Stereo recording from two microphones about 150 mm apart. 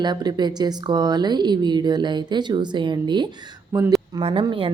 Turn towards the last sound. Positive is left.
turn(degrees=-35)  # may be behind; listen again after turning